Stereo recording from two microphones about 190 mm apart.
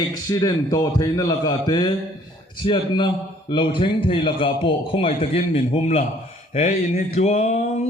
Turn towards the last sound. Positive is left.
turn(degrees=35)  # may be behind; listen again after turning